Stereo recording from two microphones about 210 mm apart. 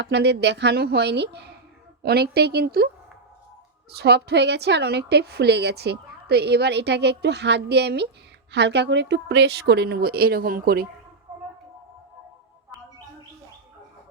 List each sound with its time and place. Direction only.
0.0 s a woman's voice: 55° right (ahead or behind)
3.9 s a woman's voice: 50° right (ahead or behind)